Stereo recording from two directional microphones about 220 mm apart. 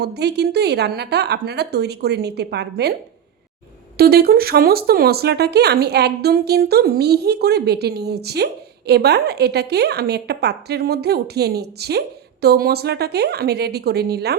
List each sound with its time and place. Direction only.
0.0 s a woman's voice: 50° right (ahead or behind)
3.9 s a woman's voice: 45° right (ahead or behind)